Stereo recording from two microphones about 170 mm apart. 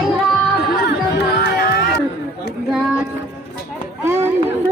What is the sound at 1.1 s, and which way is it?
Music, 80° left.